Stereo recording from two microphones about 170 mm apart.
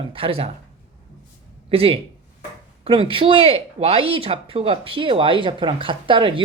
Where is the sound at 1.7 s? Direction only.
35° right (ahead or behind).